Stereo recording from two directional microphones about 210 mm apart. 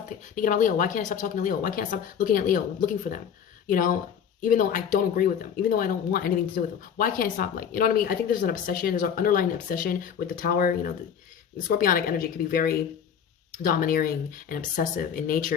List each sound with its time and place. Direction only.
0.3 s speech: 40° left (ahead or behind)